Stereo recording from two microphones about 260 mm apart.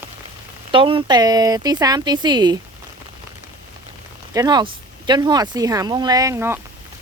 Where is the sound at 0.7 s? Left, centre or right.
Centre.